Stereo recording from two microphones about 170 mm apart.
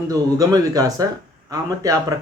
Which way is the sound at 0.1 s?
20° right (ahead or behind).